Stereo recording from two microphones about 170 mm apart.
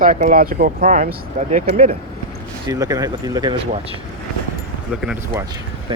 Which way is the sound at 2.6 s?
20° right (ahead or behind).